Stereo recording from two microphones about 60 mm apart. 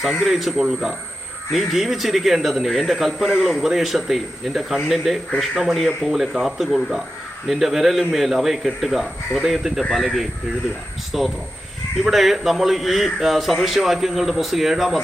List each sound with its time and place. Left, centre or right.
0.0 s a man's voice: centre